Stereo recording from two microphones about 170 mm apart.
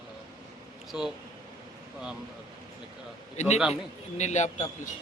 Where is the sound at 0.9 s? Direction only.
5° right (ahead or behind).